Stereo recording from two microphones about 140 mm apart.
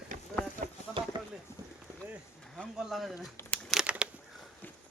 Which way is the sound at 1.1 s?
35° right (ahead or behind).